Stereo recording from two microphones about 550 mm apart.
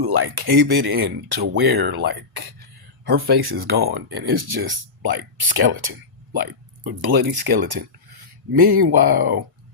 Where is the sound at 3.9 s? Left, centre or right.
Centre.